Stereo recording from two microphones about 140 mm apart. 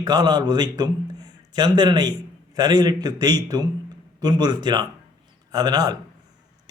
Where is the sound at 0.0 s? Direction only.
30° right (ahead or behind).